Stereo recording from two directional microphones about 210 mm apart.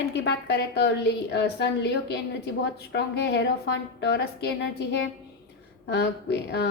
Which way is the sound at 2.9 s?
55° left (ahead or behind).